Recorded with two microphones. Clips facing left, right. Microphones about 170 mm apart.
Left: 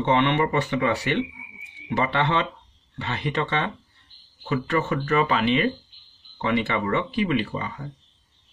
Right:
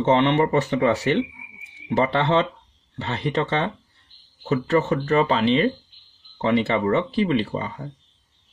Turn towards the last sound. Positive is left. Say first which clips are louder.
# right 2 dB
turn(degrees=-30)  # may be behind; listen again after turning